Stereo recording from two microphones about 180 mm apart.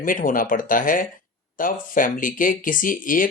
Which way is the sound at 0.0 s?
50° left (ahead or behind).